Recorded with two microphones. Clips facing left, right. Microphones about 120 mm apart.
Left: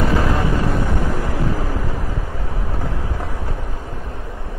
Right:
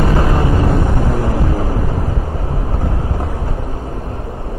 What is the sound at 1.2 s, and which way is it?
Vehicle, 35° right (ahead or behind).